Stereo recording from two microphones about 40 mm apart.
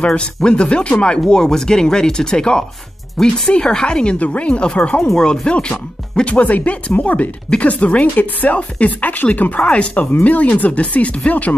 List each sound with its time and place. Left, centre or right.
0.0 s speech: left
1.3 s speech: centre
5.1 s speech: centre; by 11.5 s left